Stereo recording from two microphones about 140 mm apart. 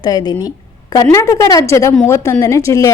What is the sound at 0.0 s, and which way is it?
Speech, 30° left (ahead or behind).